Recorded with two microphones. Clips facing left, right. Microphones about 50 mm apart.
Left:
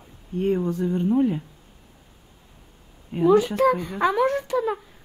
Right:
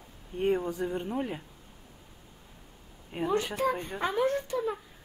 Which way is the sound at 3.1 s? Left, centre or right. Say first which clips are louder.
Left 10 dB; right.